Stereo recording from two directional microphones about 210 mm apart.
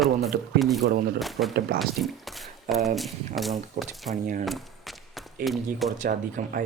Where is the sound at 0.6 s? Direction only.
Centre (ahead or behind).